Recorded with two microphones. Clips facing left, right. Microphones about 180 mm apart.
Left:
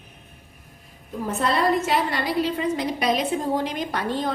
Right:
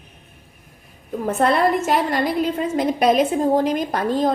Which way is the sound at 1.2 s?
55° right (ahead or behind).